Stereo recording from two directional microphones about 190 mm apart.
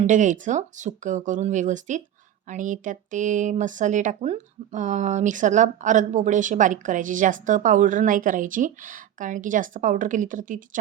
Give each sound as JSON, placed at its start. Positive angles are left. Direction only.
{"t": 0.0, "sound": "speech", "side_deg": -40}